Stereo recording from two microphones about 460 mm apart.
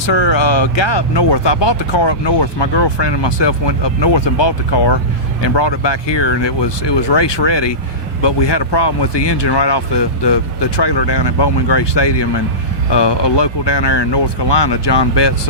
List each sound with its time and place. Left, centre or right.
0.0 s speech: left